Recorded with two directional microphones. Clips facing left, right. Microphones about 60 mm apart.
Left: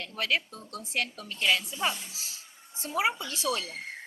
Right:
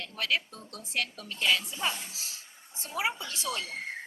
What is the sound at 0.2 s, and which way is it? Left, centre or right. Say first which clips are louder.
Speech: left 1 dB; left.